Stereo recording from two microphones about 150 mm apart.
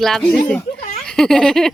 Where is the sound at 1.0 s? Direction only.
5° left (ahead or behind).